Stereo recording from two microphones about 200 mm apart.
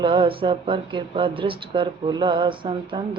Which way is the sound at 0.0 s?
25° right (ahead or behind).